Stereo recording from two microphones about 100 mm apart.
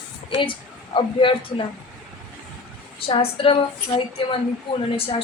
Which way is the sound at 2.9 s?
70° left (ahead or behind).